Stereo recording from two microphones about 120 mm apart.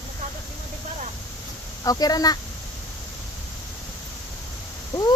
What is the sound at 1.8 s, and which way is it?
Speech, 30° left (ahead or behind).